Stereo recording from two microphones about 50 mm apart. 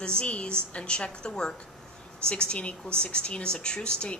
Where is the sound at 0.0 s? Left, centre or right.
Centre.